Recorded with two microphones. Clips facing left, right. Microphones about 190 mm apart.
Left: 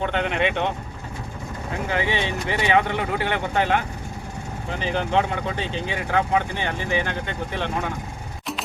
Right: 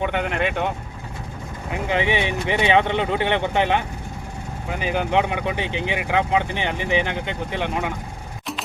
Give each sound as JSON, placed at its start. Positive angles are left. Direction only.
{"t": 0.0, "sound": "speech", "side_deg": -10}
{"t": 1.7, "sound": "speech", "side_deg": -20}